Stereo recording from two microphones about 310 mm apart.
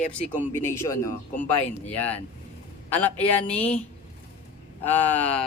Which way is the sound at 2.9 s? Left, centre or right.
Centre.